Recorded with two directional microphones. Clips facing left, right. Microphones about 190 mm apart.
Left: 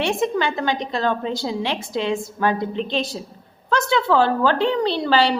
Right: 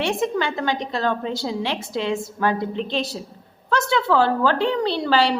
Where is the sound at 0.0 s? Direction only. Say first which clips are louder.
Left 1 dB; 15° left (ahead or behind).